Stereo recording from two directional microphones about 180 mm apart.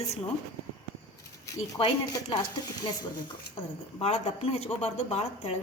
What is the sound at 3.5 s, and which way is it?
A woman's voice, 35° left (ahead or behind).